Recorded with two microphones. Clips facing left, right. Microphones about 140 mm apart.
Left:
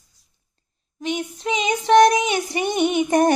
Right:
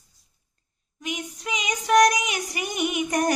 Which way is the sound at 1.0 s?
30° left (ahead or behind).